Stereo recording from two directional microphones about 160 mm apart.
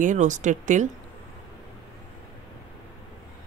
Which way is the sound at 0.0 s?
50° right (ahead or behind).